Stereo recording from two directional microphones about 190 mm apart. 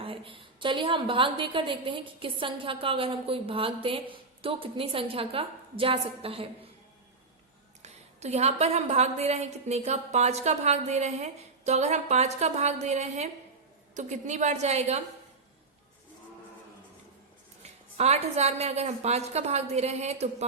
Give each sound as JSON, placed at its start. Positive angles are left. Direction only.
{"t": 0.0, "sound": "a woman's voice", "side_deg": -25}
{"t": 7.8, "sound": "a woman's voice", "side_deg": -35}
{"t": 17.6, "sound": "a woman's voice", "side_deg": -35}